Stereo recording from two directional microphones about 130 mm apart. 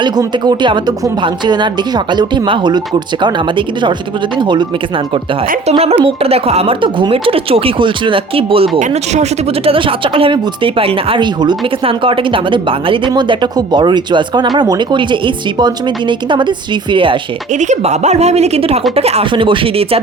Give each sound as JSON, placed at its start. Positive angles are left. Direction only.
{"t": 0.0, "sound": "speech", "side_deg": -35}
{"t": 4.4, "sound": "speech", "side_deg": -35}
{"t": 6.1, "sound": "speech", "side_deg": -50}
{"t": 17.6, "sound": "speech", "side_deg": -65}
{"t": 19.3, "sound": "speech", "side_deg": -40}